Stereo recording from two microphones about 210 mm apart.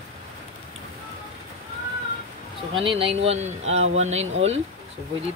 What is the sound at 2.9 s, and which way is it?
Speech, 25° right (ahead or behind).